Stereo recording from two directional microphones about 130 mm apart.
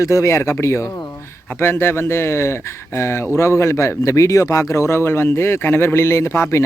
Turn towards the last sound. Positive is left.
turn(degrees=20)  # may be behind; listen again after turning